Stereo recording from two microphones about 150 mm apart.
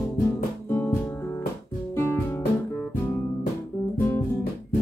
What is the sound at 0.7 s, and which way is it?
Music, 15° left (ahead or behind).